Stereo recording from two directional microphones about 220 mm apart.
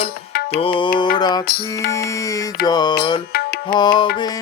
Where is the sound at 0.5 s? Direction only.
25° left (ahead or behind).